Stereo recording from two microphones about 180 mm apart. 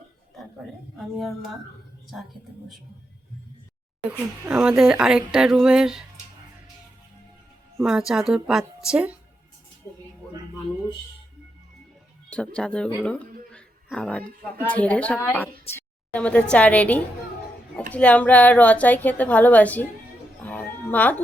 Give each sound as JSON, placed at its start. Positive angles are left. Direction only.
{"t": 0.9, "sound": "speech", "side_deg": 0}
{"t": 4.2, "sound": "speech", "side_deg": -5}
{"t": 7.9, "sound": "speech", "side_deg": -5}
{"t": 12.5, "sound": "speech", "side_deg": 5}
{"t": 13.5, "sound": "a sound", "side_deg": 5}
{"t": 14.6, "sound": "a woman's voice", "side_deg": 10}
{"t": 20.4, "sound": "music", "side_deg": 10}